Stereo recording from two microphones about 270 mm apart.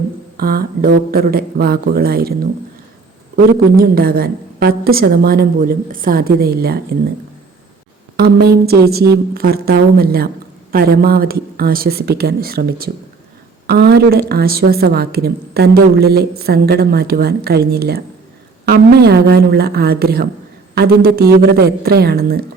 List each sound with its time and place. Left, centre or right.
0.3 s a woman's voice: right
8.1 s a woman's voice: right